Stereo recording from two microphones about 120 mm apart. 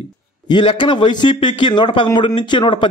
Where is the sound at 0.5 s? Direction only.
40° left (ahead or behind).